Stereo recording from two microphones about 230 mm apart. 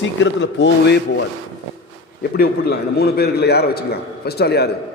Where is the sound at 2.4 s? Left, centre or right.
Left.